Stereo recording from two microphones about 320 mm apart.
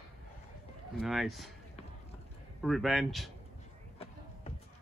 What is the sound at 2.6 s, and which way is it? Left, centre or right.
Speech, centre.